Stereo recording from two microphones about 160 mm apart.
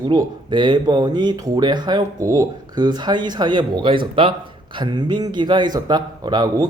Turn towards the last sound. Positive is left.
turn(degrees=-25)  # may be behind; listen again after turning